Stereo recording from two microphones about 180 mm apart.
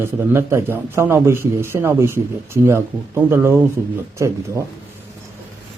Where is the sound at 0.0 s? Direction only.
15° right (ahead or behind).